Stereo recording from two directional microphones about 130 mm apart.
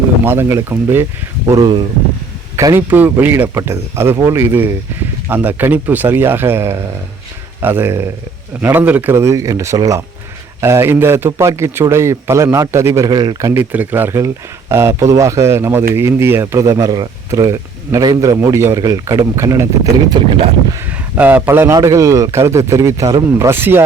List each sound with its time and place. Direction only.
0.3 s speech: 20° right (ahead or behind)
1.5 s speech: 30° right (ahead or behind)
13.5 s speech: 15° right (ahead or behind)
21.2 s speech: 15° right (ahead or behind)